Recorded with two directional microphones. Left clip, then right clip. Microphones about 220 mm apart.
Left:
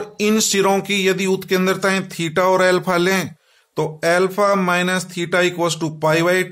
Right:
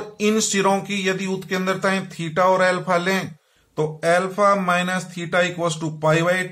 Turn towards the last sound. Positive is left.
turn(degrees=40)  # may be behind; listen again after turning